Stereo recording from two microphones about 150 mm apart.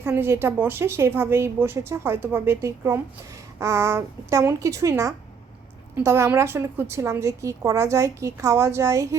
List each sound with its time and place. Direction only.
0.0 s a woman's voice: 15° right (ahead or behind)